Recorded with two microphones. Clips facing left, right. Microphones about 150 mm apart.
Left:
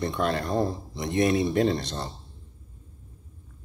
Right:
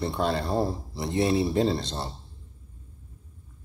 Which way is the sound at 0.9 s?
30° right (ahead or behind).